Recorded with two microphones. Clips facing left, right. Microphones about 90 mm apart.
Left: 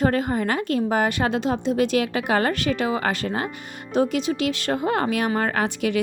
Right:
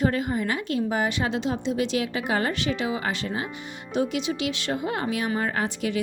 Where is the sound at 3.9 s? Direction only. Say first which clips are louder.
Left 4 dB; 45° left (ahead or behind); by 6.0 s 70° left (ahead or behind).